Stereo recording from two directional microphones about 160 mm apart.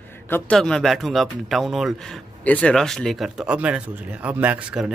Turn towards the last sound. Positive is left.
turn(degrees=-5)  # may be behind; listen again after turning